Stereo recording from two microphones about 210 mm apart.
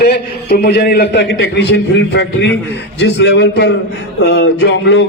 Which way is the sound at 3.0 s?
55° left (ahead or behind).